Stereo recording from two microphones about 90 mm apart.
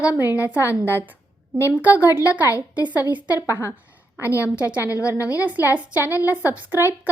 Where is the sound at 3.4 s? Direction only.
35° left (ahead or behind).